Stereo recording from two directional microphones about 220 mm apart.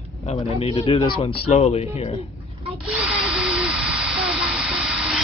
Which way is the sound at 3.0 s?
5° right (ahead or behind).